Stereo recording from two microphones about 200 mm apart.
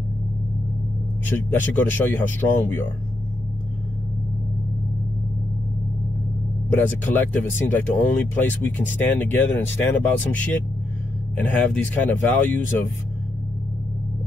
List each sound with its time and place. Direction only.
1.2 s speech: 10° left (ahead or behind)
6.7 s speech: 10° left (ahead or behind)